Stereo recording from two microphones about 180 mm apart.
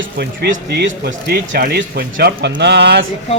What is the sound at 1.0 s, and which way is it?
Speech, 60° right (ahead or behind).